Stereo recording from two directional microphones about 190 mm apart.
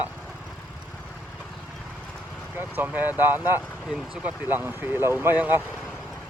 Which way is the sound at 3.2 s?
10° right (ahead or behind).